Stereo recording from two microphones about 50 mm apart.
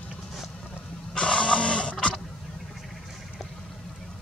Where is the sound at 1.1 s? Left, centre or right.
Centre.